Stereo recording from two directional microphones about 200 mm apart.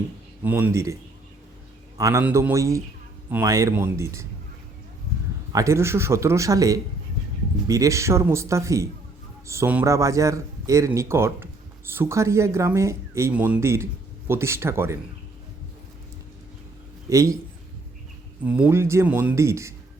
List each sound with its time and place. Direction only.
0.4 s speech: 10° right (ahead or behind)
2.0 s speech: 15° right (ahead or behind)
5.5 s speech: 15° right (ahead or behind)
17.1 s speech: 15° right (ahead or behind)
18.4 s speech: 5° right (ahead or behind)